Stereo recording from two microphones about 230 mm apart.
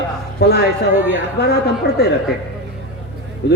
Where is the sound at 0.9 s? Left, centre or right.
Centre.